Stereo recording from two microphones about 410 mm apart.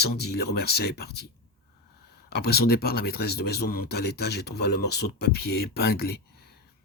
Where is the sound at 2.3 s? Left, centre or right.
Left.